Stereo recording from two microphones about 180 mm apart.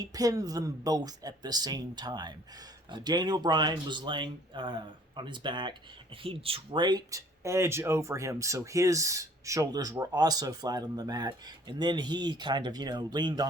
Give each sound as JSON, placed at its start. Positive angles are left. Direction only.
{"t": 0.0, "sound": "speech", "side_deg": -20}